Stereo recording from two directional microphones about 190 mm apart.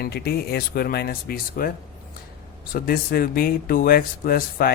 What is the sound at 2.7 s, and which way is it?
Speech, 50° left (ahead or behind).